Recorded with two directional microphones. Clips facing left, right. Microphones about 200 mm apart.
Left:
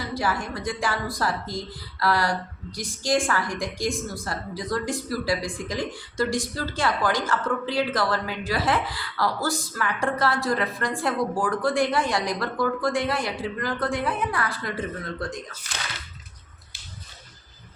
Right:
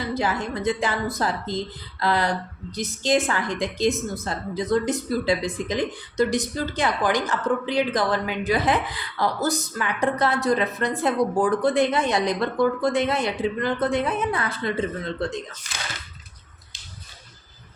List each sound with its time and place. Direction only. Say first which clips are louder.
0.1 s a woman's voice: right 2 dB; 20° right (ahead or behind)